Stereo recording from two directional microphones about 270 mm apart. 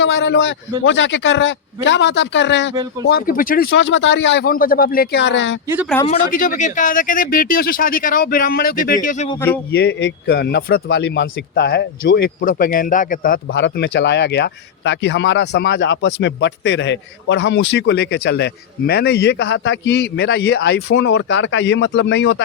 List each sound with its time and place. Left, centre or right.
0.0 s a man's voice: left
5.6 s speech: centre
6.1 s speech: left
9.7 s speech: left